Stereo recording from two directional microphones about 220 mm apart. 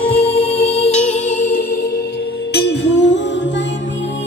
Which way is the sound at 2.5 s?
50° left (ahead or behind).